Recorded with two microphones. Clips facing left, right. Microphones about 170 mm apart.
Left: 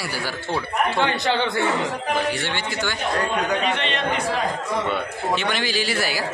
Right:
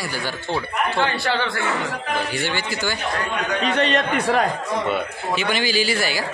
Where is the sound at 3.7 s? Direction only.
40° right (ahead or behind).